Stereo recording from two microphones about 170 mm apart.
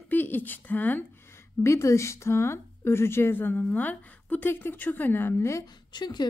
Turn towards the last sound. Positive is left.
turn(degrees=25)  # may be behind; listen again after turning